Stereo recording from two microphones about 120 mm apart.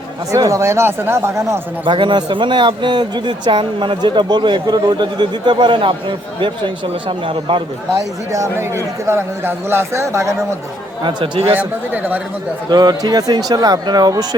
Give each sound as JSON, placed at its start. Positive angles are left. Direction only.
{"t": 0.3, "sound": "a man's voice", "side_deg": -25}
{"t": 1.8, "sound": "a man's voice", "side_deg": -45}
{"t": 7.9, "sound": "a man's voice", "side_deg": -25}
{"t": 11.0, "sound": "a man's voice", "side_deg": -50}
{"t": 11.5, "sound": "a man's voice", "side_deg": -15}
{"t": 12.7, "sound": "speech", "side_deg": -35}